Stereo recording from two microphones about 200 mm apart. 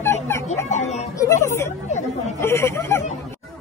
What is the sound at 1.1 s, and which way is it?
Speech, 15° left (ahead or behind).